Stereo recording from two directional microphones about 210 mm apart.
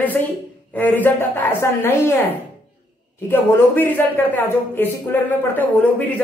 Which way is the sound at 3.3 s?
10° left (ahead or behind).